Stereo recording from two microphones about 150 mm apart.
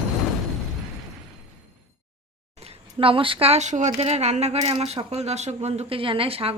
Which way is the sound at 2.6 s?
40° right (ahead or behind).